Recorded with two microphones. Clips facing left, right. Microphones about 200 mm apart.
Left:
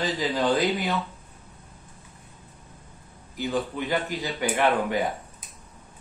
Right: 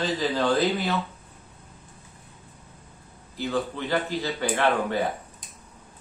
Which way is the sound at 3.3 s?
15° left (ahead or behind).